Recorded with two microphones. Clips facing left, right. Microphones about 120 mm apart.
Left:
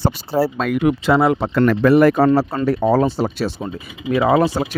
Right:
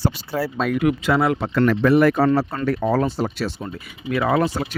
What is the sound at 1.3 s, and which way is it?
Speech, 35° left (ahead or behind).